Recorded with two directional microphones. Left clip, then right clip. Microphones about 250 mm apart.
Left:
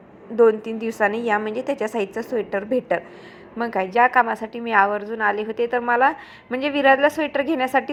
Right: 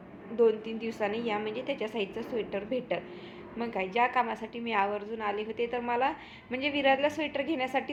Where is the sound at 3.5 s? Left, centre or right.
Left.